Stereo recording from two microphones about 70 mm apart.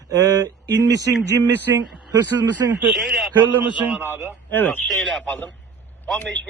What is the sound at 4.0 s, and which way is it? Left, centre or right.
Speech, right.